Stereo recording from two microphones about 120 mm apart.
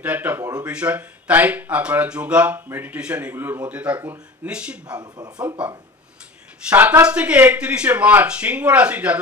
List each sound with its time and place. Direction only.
0.0 s speech: 15° right (ahead or behind)
4.9 s speech: 35° right (ahead or behind)
5.6 s speech: 10° right (ahead or behind)